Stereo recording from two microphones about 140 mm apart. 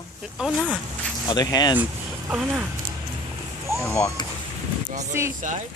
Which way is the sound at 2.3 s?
10° right (ahead or behind).